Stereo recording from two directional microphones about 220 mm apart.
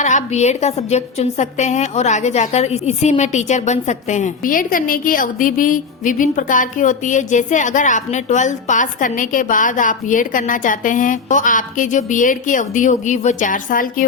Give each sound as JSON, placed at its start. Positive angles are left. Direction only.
{"t": 0.0, "sound": "a woman's voice", "side_deg": 35}